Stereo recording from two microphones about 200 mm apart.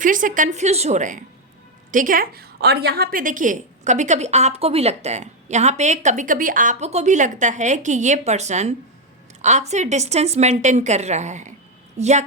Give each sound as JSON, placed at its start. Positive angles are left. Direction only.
{"t": 0.0, "sound": "a woman's voice", "side_deg": -40}